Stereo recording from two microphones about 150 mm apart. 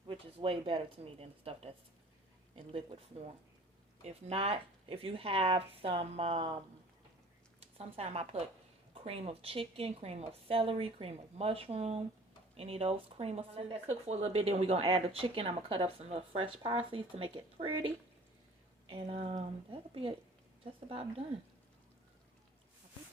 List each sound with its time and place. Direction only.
0.1 s speech: 35° right (ahead or behind)
4.0 s speech: 40° right (ahead or behind)
7.6 s speech: 40° right (ahead or behind)